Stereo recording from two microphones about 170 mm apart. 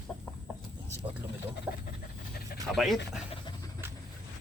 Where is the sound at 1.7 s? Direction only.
10° right (ahead or behind).